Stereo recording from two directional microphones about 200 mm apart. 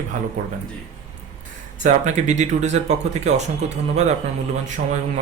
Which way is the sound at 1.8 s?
35° right (ahead or behind).